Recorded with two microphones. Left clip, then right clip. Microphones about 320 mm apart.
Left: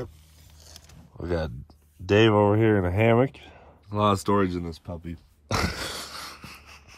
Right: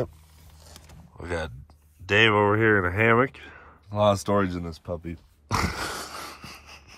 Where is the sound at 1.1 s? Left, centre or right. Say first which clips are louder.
Left 2 dB; centre.